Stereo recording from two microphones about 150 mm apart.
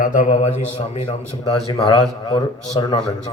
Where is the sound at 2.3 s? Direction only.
25° left (ahead or behind).